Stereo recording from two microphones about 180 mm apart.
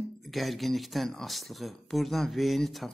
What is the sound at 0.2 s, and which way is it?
Speech, centre (ahead or behind).